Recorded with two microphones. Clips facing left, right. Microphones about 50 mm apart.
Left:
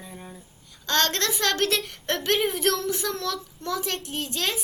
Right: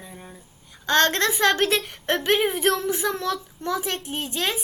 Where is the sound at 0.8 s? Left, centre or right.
Centre.